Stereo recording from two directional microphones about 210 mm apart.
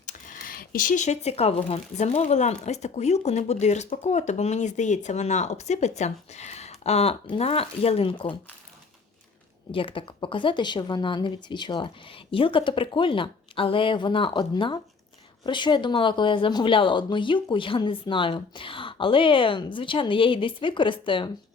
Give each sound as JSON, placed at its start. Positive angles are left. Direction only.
{"t": 0.0, "sound": "speech", "side_deg": 40}
{"t": 9.7, "sound": "speech", "side_deg": 25}